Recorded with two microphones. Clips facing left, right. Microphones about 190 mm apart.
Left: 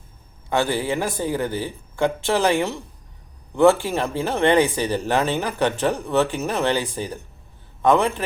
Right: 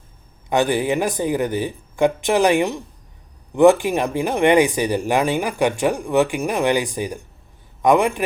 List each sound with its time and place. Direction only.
0.5 s a man's voice: 15° right (ahead or behind)